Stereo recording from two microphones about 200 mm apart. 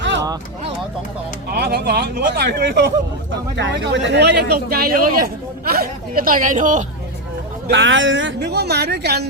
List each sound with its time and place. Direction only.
0.0 s a sound: 65° right (ahead or behind)
1.5 s speech: 50° right (ahead or behind)
3.5 s speech: 60° right (ahead or behind); by 6.8 s 40° right (ahead or behind)
7.7 s speech: 70° right (ahead or behind)